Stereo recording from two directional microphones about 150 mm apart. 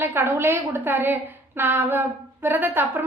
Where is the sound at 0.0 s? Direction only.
15° right (ahead or behind).